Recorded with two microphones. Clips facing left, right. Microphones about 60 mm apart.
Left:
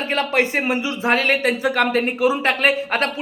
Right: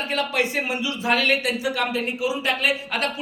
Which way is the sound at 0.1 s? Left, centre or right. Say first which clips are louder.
Left 5 dB; left.